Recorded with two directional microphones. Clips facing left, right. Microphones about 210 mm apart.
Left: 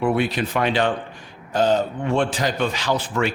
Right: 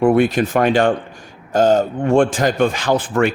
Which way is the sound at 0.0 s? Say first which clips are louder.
Right 7 dB; 50° right (ahead or behind).